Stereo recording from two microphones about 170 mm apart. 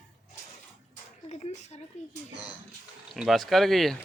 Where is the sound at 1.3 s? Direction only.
40° left (ahead or behind).